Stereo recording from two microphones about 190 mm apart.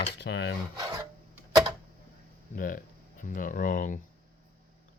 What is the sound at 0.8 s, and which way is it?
Filing, 20° right (ahead or behind).